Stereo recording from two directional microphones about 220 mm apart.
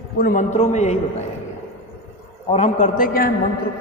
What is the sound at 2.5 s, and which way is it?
Speech, 30° left (ahead or behind).